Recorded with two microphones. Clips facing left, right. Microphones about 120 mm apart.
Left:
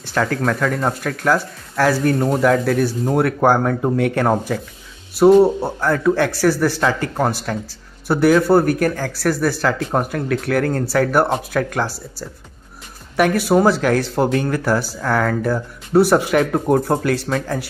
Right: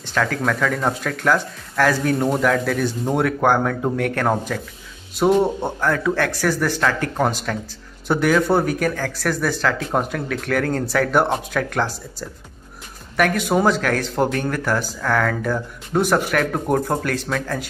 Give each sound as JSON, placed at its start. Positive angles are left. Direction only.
{"t": 0.1, "sound": "speech", "side_deg": 5}
{"t": 13.5, "sound": "speech", "side_deg": 10}